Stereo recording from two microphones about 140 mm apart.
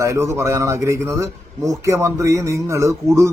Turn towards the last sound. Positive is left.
turn(degrees=-20)  # may be behind; listen again after turning